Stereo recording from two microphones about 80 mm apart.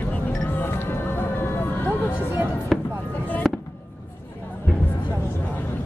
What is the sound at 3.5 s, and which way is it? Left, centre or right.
Fireworks, centre.